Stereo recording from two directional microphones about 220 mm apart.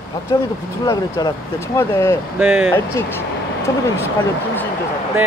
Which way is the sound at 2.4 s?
10° right (ahead or behind).